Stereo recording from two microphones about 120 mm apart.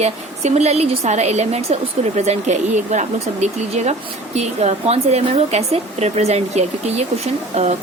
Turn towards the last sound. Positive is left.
turn(degrees=-70)  # may be behind; listen again after turning